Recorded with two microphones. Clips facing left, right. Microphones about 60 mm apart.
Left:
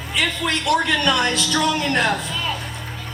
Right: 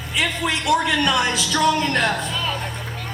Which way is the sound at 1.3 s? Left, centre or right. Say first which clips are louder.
Left 1 dB; left.